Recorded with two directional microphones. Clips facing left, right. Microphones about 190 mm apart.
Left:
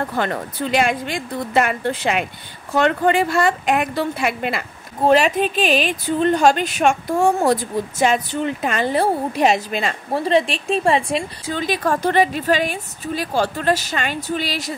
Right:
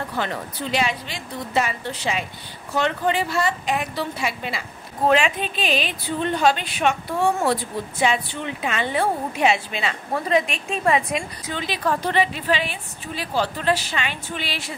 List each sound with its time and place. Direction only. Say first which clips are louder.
0.1 s a woman's voice: left 4 dB; 50° left (ahead or behind)
5.0 s speech: left 4 dB; 40° left (ahead or behind)
10.2 s a woman's voice: left 4 dB; 30° left (ahead or behind)
11.5 s speech: left 4 dB; 45° left (ahead or behind)